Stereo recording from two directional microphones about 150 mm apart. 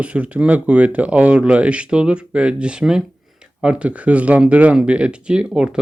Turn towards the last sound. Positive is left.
turn(degrees=-5)  # may be behind; listen again after turning